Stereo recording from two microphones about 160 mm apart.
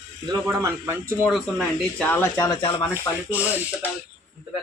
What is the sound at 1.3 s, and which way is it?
Speech, centre (ahead or behind).